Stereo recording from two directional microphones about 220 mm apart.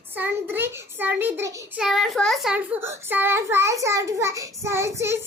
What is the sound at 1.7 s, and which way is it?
A child's voice, centre (ahead or behind).